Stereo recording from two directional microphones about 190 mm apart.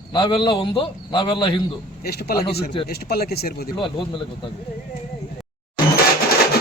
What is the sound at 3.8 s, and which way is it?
Speech, 25° left (ahead or behind).